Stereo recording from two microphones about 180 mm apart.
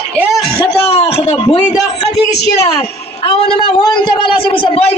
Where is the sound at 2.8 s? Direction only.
30° left (ahead or behind).